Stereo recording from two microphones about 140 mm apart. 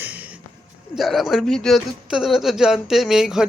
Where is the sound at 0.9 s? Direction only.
Centre (ahead or behind).